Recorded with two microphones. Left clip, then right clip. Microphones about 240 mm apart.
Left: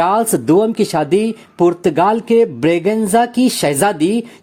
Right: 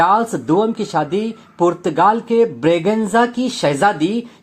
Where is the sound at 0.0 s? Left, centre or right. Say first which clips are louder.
Even; left.